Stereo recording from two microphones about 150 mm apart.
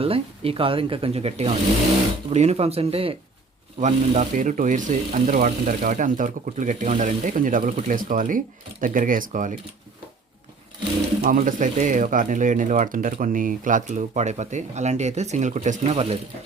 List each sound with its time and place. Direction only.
0.0 s speech: 40° right (ahead or behind)
3.8 s speech: 55° right (ahead or behind)
11.3 s speech: 55° right (ahead or behind)